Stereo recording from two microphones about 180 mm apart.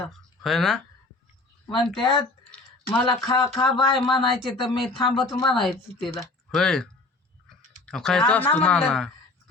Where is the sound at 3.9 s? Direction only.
Centre (ahead or behind).